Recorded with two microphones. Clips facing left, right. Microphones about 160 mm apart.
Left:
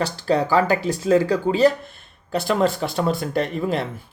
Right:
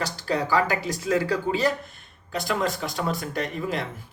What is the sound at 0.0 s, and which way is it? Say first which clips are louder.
Speech: left 6 dB; 30° left (ahead or behind).